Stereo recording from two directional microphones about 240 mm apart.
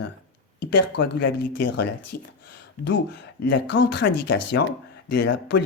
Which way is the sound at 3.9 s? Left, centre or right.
Left.